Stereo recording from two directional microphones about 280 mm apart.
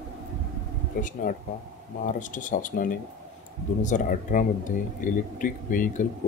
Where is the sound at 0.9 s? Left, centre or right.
Left.